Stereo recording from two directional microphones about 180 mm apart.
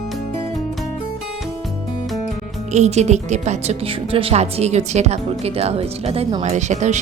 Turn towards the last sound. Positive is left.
turn(degrees=-40)  # may be behind; listen again after turning